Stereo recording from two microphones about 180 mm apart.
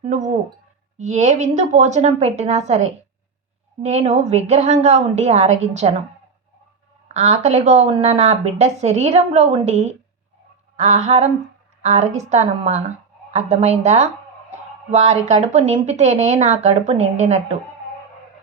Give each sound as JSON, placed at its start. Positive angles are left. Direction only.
{"t": 0.0, "sound": "speech", "side_deg": -40}
{"t": 7.1, "sound": "speech", "side_deg": -40}